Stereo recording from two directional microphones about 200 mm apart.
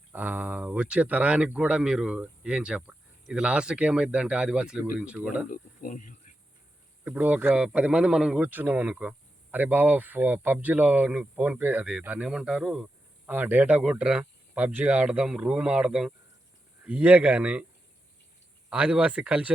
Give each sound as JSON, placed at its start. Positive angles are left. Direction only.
{"t": 0.1, "sound": "speech", "side_deg": -10}
{"t": 5.5, "sound": "speech", "side_deg": 40}
{"t": 7.0, "sound": "speech", "side_deg": -5}
{"t": 18.7, "sound": "speech", "side_deg": -5}